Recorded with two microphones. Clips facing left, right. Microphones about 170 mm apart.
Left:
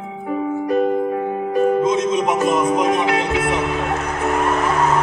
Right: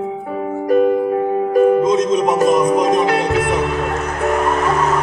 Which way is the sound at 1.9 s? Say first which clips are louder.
Right 3 dB; 40° right (ahead or behind).